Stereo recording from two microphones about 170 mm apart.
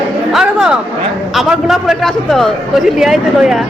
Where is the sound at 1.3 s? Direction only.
Centre (ahead or behind).